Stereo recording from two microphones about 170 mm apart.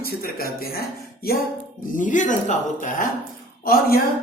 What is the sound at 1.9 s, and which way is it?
Speech, 50° left (ahead or behind).